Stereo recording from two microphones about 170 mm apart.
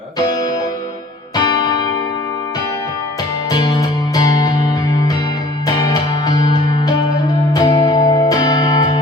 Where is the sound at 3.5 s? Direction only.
25° left (ahead or behind).